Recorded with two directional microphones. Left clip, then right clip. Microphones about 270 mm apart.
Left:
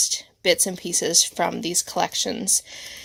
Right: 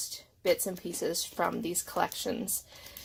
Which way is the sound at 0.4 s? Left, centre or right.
Left.